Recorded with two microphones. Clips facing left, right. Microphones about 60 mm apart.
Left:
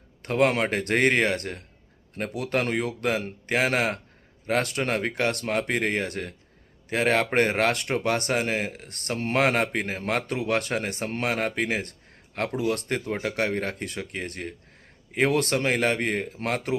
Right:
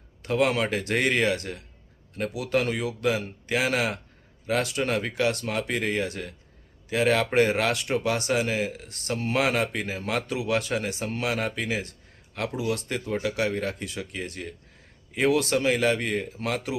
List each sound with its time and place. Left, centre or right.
0.2 s speech: left